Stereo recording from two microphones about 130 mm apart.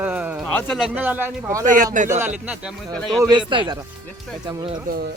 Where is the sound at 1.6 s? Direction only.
90° right.